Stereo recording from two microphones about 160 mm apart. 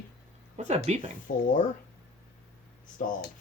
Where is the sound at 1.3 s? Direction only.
60° left (ahead or behind).